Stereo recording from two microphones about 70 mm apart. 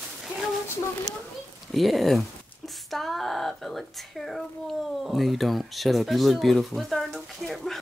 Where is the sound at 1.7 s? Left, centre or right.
Centre.